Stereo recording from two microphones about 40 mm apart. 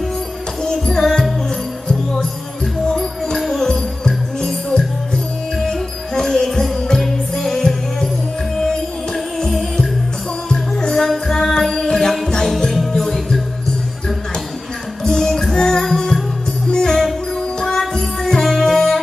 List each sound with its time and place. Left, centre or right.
0.7 s music: centre
2.9 s music: centre
10.5 s music: centre
15.0 s music: centre